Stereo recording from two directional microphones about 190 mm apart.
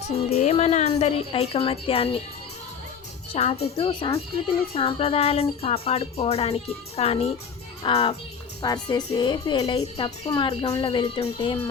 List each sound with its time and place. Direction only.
0.1 s speech: 35° left (ahead or behind)
3.3 s a woman's voice: 35° left (ahead or behind)
11.3 s speech: 15° left (ahead or behind)